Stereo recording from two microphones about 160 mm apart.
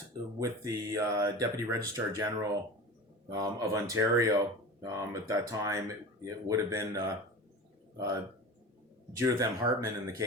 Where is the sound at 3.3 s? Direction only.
20° right (ahead or behind).